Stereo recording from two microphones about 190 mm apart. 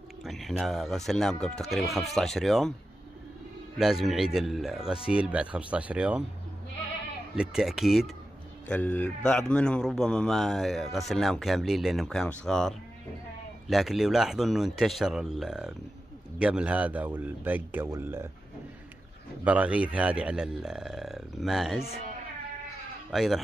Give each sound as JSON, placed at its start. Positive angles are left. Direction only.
{"t": 0.2, "sound": "a man's voice", "side_deg": 0}
{"t": 3.7, "sound": "a man's voice", "side_deg": 0}
{"t": 7.3, "sound": "a man's voice", "side_deg": 0}
{"t": 19.4, "sound": "a man's voice", "side_deg": -5}
{"t": 23.1, "sound": "a man's voice", "side_deg": 0}